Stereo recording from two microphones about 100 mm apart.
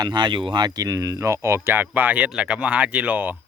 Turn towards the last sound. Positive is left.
turn(degrees=-15)  # may be behind; listen again after turning